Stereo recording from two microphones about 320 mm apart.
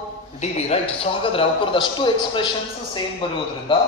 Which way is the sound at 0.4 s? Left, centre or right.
Centre.